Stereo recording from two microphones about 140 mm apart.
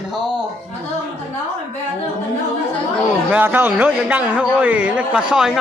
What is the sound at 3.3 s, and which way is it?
Speech, 15° right (ahead or behind).